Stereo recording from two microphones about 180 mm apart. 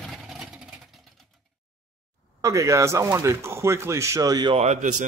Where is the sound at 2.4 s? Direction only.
15° right (ahead or behind).